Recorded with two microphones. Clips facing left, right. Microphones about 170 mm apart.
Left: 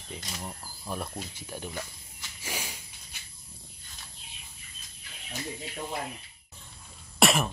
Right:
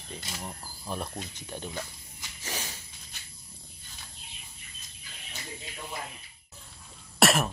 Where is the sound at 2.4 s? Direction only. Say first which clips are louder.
Even; 10° left (ahead or behind).